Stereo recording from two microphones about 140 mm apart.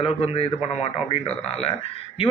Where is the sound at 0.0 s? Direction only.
45° left (ahead or behind).